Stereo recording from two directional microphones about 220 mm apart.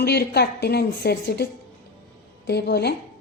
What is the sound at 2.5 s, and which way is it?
Speech, 45° left (ahead or behind).